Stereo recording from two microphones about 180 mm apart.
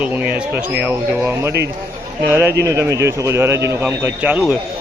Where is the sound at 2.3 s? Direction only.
15° right (ahead or behind).